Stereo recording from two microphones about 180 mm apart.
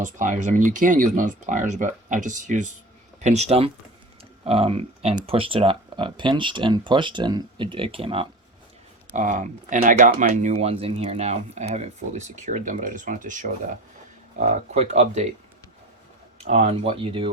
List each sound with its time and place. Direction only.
0.0 s speech: 45° right (ahead or behind)
9.1 s speech: 45° right (ahead or behind)
16.4 s speech: 35° right (ahead or behind)